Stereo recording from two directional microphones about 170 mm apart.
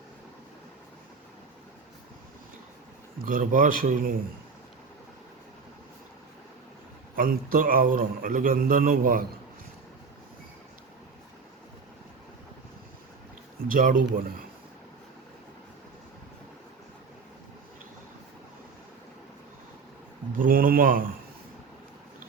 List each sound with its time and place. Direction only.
3.2 s speech: 55° right (ahead or behind)
7.2 s a man's voice: 55° right (ahead or behind)
13.7 s a man's voice: 55° right (ahead or behind)
20.3 s a man's voice: 55° right (ahead or behind)